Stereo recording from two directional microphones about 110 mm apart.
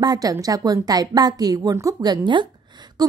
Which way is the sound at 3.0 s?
35° right (ahead or behind).